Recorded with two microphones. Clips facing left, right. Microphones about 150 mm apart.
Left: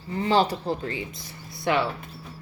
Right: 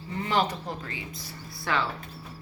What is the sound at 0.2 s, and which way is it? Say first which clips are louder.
Speech: left 5 dB; 30° left (ahead or behind).